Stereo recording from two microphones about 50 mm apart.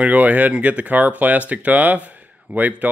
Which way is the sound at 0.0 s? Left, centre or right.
Right.